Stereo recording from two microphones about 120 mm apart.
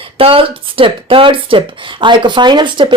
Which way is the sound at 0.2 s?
50° right (ahead or behind).